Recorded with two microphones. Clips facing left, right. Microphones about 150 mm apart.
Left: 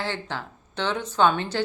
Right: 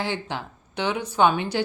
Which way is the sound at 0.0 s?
15° right (ahead or behind).